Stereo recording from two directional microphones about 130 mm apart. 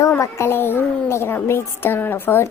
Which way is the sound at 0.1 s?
20° left (ahead or behind).